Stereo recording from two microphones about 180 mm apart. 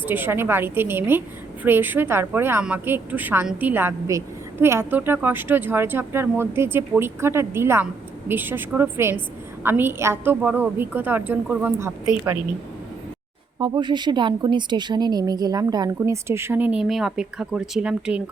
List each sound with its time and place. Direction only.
0.0 s a woman's voice: 10° right (ahead or behind)
13.6 s a woman's voice: 25° right (ahead or behind); by 18.2 s 5° right (ahead or behind)